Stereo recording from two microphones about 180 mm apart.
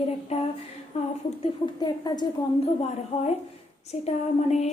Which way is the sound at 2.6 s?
35° left (ahead or behind).